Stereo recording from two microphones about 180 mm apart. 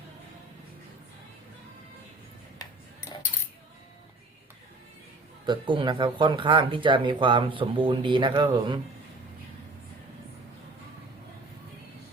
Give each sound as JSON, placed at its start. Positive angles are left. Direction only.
{"t": 5.5, "sound": "speech", "side_deg": -25}